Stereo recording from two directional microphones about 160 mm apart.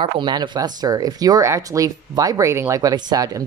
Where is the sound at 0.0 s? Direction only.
30° right (ahead or behind).